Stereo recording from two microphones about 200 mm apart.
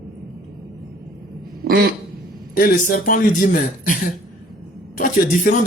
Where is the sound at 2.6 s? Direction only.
45° left (ahead or behind).